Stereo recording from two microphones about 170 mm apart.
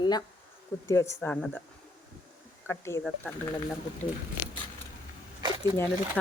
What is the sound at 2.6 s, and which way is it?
Speech, 15° left (ahead or behind).